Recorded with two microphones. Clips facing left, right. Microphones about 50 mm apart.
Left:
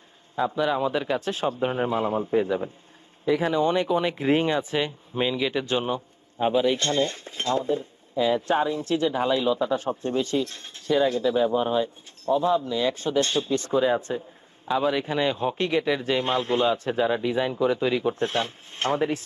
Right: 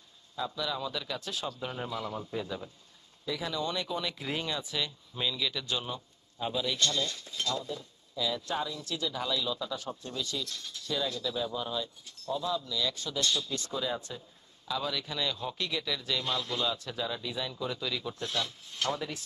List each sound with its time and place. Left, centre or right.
0.4 s speech: left